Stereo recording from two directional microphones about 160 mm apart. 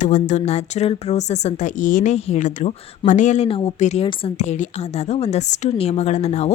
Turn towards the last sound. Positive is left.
turn(degrees=40)  # may be behind; listen again after turning